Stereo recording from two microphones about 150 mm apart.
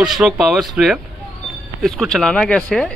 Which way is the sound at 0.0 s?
Centre (ahead or behind).